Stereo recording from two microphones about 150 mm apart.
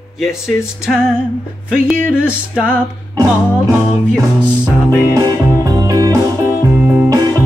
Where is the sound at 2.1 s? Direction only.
5° right (ahead or behind).